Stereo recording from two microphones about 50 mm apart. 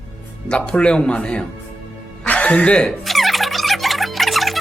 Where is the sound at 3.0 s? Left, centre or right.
Centre.